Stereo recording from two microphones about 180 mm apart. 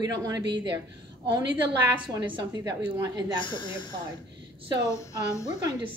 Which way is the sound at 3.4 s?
25° left (ahead or behind).